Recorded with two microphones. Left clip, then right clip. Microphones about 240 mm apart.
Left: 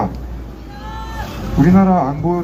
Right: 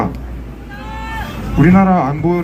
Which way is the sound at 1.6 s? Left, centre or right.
Right.